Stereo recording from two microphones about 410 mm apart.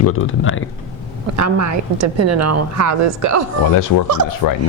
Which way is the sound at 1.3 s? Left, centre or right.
Right.